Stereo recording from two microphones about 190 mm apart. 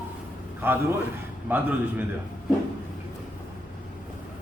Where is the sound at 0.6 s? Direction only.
10° right (ahead or behind).